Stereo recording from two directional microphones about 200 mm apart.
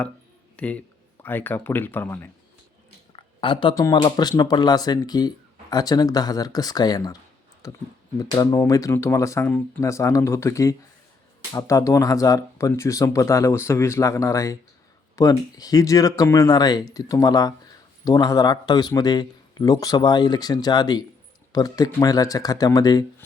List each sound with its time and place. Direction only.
0.5 s speech: 5° left (ahead or behind)
3.1 s a man's voice: 25° left (ahead or behind)